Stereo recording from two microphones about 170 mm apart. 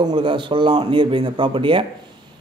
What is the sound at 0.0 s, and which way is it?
Speech, 30° right (ahead or behind).